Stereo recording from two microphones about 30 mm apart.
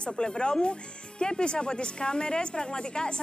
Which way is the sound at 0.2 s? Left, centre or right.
Left.